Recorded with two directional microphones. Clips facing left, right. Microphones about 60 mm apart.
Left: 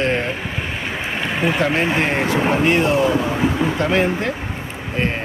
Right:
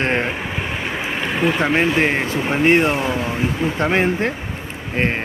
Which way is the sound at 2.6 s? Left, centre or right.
Right.